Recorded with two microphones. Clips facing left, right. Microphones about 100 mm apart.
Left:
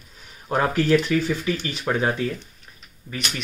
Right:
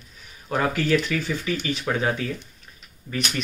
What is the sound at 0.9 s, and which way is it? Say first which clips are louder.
Speech: left 3 dB; 15° left (ahead or behind).